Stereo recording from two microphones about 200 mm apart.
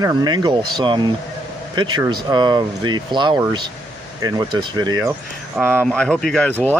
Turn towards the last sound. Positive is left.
turn(degrees=5)  # may be behind; listen again after turning